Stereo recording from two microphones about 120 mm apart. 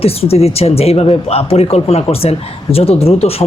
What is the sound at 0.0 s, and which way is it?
Speech, 55° left (ahead or behind).